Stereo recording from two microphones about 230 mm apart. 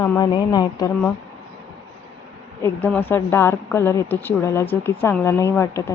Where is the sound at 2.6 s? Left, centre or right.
Centre.